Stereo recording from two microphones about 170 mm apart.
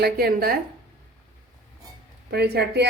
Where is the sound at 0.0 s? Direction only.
65° right (ahead or behind).